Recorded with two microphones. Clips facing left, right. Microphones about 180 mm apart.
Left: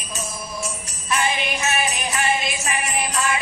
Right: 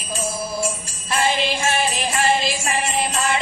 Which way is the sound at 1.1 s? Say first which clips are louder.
Right 3 dB; 30° right (ahead or behind).